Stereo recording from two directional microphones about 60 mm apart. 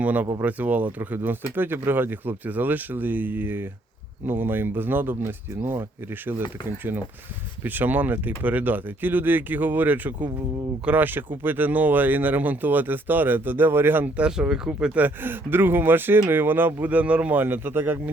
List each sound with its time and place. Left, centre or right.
0.0 s speech: right
14.2 s speech: centre
15.0 s speech: right
17.4 s speech: right